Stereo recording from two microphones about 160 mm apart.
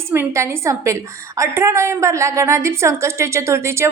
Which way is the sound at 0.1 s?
15° right (ahead or behind).